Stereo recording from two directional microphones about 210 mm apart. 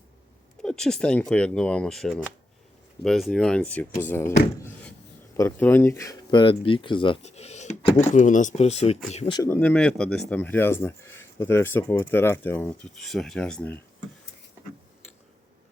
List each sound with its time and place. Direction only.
0.6 s speech: 5° left (ahead or behind); by 9.4 s 25° left (ahead or behind)
9.4 s speech: 10° left (ahead or behind)